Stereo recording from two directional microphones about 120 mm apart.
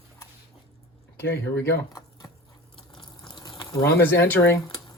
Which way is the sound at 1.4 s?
15° left (ahead or behind).